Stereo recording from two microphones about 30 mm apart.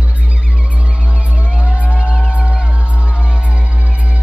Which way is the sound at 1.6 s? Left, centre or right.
Right.